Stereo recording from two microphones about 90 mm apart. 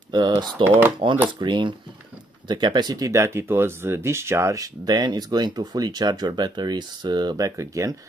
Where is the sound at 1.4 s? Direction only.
60° right (ahead or behind).